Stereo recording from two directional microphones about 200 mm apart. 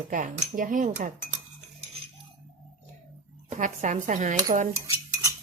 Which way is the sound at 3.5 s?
40° right (ahead or behind).